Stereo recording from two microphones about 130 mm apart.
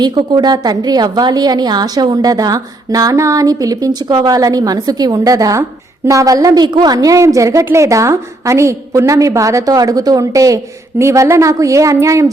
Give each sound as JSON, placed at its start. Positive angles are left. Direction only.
{"t": 0.0, "sound": "a woman's voice", "side_deg": -35}